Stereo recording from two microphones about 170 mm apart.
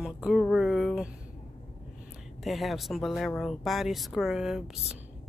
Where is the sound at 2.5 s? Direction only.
Centre (ahead or behind).